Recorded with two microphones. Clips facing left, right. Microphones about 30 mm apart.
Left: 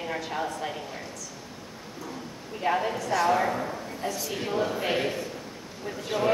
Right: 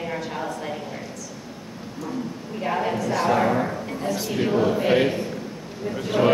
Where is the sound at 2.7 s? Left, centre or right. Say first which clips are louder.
Even; centre.